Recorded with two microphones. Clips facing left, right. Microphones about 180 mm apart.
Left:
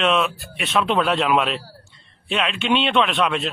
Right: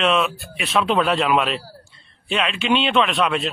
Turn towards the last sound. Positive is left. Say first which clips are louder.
# right 1 dB
turn(degrees=0)  # may be behind; listen again after turning